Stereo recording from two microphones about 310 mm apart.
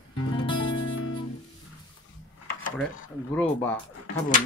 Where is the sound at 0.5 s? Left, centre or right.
Left.